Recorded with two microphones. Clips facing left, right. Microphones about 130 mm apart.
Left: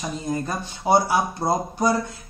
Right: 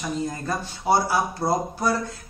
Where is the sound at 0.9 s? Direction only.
20° left (ahead or behind).